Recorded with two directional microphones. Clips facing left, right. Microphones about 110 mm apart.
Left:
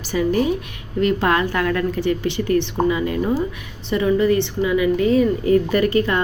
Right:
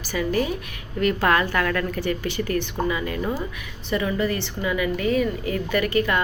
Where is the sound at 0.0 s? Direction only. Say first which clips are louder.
Left 5 dB; 25° left (ahead or behind).